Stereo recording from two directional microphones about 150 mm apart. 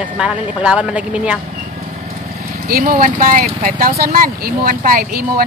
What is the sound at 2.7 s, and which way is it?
Speech, 70° right (ahead or behind).